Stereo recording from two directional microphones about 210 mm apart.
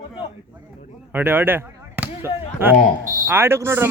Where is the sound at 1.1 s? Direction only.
10° right (ahead or behind).